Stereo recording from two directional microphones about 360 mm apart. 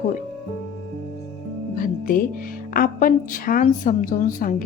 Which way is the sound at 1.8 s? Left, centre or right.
Left.